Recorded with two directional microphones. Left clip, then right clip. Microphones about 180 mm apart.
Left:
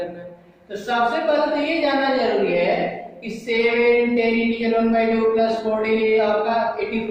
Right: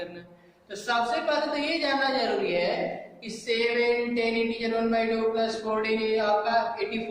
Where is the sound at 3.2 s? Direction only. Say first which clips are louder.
Left 6 dB; centre (ahead or behind).